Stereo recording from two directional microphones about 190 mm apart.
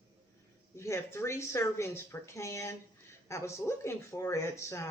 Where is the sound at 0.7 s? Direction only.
15° left (ahead or behind).